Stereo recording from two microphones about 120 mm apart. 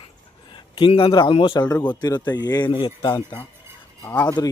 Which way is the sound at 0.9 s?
50° left (ahead or behind).